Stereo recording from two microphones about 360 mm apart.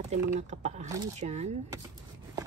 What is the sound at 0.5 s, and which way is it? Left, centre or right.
Speech, centre.